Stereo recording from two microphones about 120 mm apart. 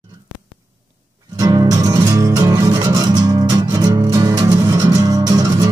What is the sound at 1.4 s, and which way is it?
Music, 30° right (ahead or behind).